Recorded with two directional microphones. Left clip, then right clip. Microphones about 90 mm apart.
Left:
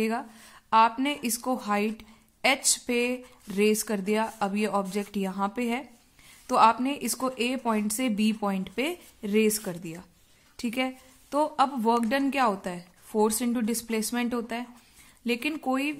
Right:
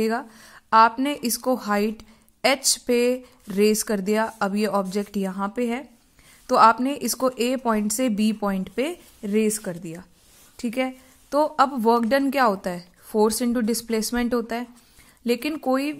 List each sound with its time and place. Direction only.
0.0 s a woman's voice: 35° right (ahead or behind)
5.3 s a woman's voice: 20° right (ahead or behind)
6.4 s a woman's voice: 35° right (ahead or behind)